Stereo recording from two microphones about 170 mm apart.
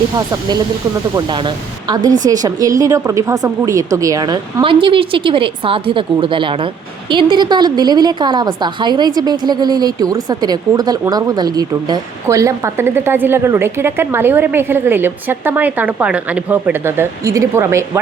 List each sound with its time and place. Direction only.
1.1 s a woman's voice: 25° right (ahead or behind)